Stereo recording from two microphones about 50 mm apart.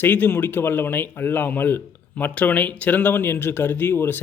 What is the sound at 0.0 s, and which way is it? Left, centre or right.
Speech, left.